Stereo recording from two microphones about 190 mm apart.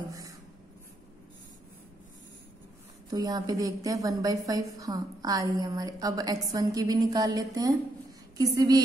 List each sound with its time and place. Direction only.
0.1 s writing: 20° right (ahead or behind)
3.1 s a woman's voice: 20° right (ahead or behind)